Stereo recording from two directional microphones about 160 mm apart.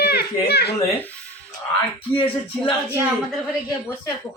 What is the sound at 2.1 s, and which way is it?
Speech, 35° left (ahead or behind).